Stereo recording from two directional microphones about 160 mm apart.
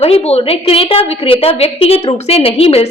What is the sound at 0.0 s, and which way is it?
A woman's voice, 40° left (ahead or behind).